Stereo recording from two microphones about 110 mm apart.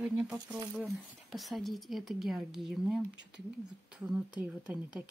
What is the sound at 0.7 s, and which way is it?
A woman's voice, centre (ahead or behind).